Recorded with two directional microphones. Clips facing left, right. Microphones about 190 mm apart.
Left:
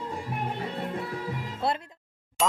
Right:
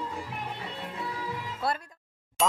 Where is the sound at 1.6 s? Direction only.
25° left (ahead or behind).